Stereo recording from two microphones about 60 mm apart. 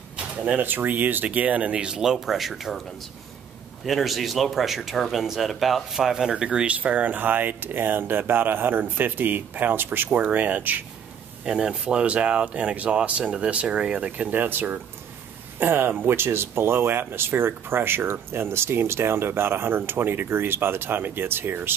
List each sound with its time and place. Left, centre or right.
0.6 s speech: right; by 2.8 s centre
3.8 s speech: centre; by 10.8 s right
11.4 s speech: centre; by 21.7 s right